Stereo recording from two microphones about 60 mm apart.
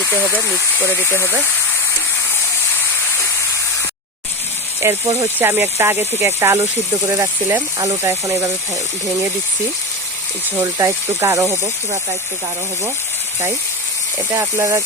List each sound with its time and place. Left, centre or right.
0.9 s speech: left
4.8 s speech: right
5.4 s speech: right
7.1 s speech: right
10.6 s speech: right
14.5 s speech: right